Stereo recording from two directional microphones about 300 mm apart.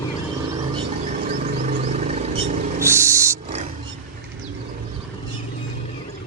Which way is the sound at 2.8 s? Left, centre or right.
Centre.